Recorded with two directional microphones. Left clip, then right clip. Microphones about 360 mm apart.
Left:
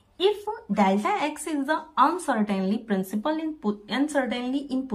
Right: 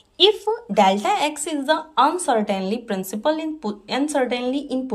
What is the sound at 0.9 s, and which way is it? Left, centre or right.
A woman's voice, centre.